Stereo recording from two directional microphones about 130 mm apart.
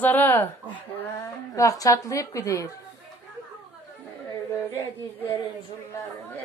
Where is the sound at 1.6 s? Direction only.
25° left (ahead or behind).